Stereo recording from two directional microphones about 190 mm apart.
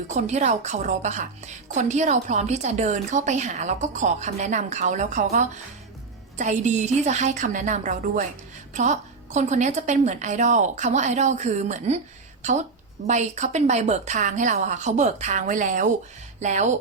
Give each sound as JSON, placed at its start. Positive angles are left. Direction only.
{"t": 0.1, "sound": "a woman's voice", "side_deg": -40}